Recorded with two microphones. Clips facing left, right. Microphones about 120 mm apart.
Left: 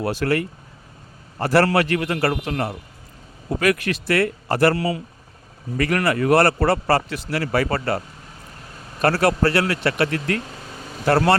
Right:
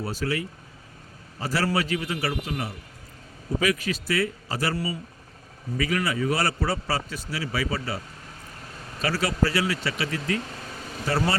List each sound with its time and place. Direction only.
0.0 s a man's voice: 70° left (ahead or behind)
5.7 s a man's voice: 60° left (ahead or behind)